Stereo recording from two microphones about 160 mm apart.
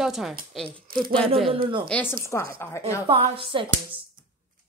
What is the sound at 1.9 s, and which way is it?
Speech, 10° left (ahead or behind).